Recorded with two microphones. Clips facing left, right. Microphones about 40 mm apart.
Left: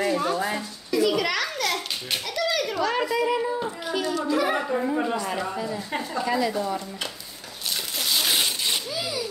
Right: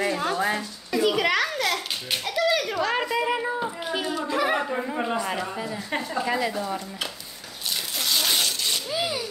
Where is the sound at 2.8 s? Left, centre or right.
Right.